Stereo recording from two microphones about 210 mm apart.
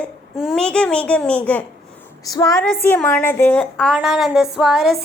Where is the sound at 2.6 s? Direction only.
5° left (ahead or behind).